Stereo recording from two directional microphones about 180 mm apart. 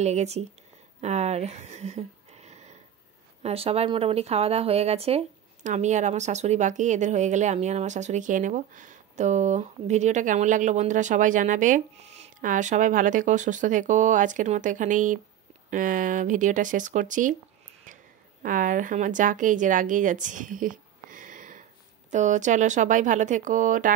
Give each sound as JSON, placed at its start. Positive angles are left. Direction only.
{"t": 0.0, "sound": "speech", "side_deg": -40}
{"t": 17.9, "sound": "a sound", "side_deg": -45}
{"t": 18.4, "sound": "speech", "side_deg": -50}